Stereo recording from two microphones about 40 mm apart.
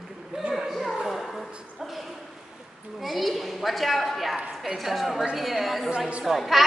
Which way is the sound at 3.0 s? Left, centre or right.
Centre.